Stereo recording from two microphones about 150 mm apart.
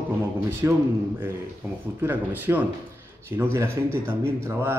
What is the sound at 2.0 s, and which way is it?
Speech, 15° right (ahead or behind).